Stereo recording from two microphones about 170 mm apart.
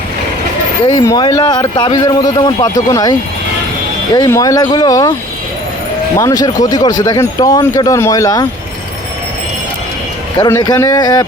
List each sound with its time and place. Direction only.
0.9 s speech: 25° left (ahead or behind)
6.1 s speech: 20° left (ahead or behind)
10.3 s speech: 20° left (ahead or behind)